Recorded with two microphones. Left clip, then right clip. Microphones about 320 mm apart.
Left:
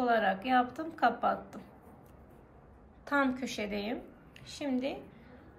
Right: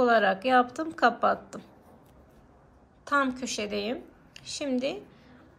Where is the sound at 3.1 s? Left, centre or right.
Centre.